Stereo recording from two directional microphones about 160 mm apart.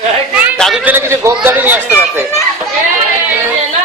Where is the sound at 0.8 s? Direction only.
15° right (ahead or behind).